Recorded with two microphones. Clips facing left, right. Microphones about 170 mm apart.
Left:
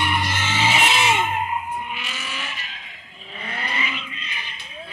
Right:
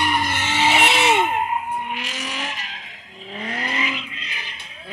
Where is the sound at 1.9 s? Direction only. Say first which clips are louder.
Right 3 dB; 90° right.